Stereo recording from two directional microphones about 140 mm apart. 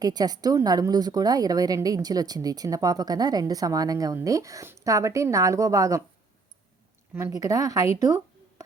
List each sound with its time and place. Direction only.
0.0 s a woman's voice: 30° right (ahead or behind)
7.1 s a woman's voice: 20° right (ahead or behind)
7.9 s a sound: 25° right (ahead or behind)